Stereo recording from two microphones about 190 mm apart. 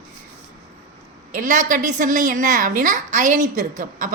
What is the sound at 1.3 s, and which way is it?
A woman's voice, 45° right (ahead or behind).